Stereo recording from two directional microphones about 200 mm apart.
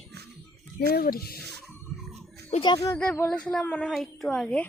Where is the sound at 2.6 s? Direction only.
20° left (ahead or behind).